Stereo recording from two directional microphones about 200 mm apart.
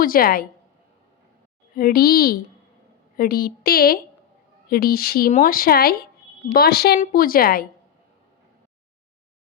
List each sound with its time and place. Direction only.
0.0 s speech: 45° left (ahead or behind)
1.7 s speech: 45° left (ahead or behind)